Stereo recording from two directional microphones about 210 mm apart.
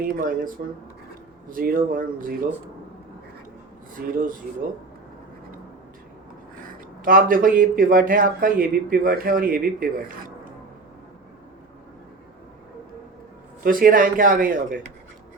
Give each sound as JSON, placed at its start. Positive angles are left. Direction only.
{"t": 0.0, "sound": "a man's voice", "side_deg": -40}
{"t": 4.0, "sound": "speech", "side_deg": -45}
{"t": 7.0, "sound": "a man's voice", "side_deg": -40}
{"t": 13.7, "sound": "a man's voice", "side_deg": -40}